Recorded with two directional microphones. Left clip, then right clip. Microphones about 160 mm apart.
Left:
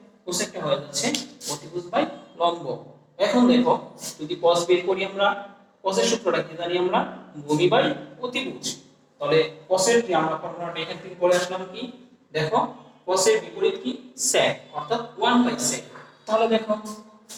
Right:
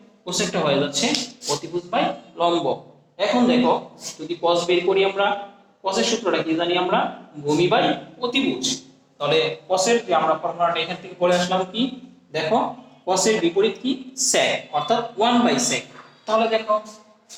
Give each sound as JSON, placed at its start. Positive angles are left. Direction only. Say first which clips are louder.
{"t": 0.3, "sound": "a man's voice", "louder": "right 5 dB", "side_deg": -25}